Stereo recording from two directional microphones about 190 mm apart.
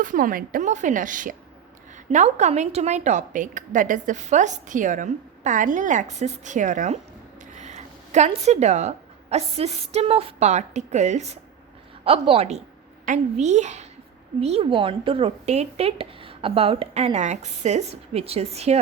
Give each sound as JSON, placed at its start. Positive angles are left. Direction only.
{"t": 0.0, "sound": "a woman's voice", "side_deg": -45}
{"t": 7.5, "sound": "a sound", "side_deg": -40}
{"t": 8.4, "sound": "a woman's voice", "side_deg": -35}